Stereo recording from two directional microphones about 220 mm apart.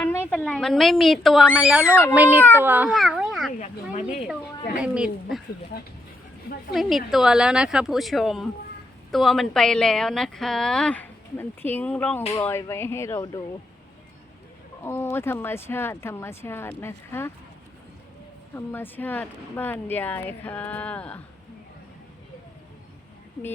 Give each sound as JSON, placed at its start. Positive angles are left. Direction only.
{"t": 0.0, "sound": "a woman's voice", "side_deg": 10}
{"t": 4.8, "sound": "a woman's voice", "side_deg": -5}
{"t": 5.7, "sound": "speech", "side_deg": 45}
{"t": 6.7, "sound": "a woman's voice", "side_deg": 0}
{"t": 14.8, "sound": "speech", "side_deg": 10}
{"t": 18.5, "sound": "speech", "side_deg": 10}